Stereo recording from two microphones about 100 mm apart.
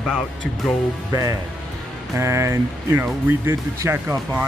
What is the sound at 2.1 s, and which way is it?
Speech, 30° right (ahead or behind).